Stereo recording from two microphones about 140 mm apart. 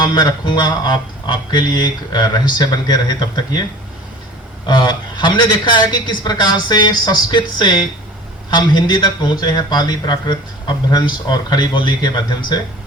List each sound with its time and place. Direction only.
0.0 s a man's voice: 30° left (ahead or behind)
4.6 s a man's voice: 30° left (ahead or behind)